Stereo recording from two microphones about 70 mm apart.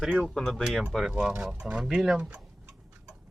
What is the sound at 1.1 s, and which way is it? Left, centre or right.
Speech, centre.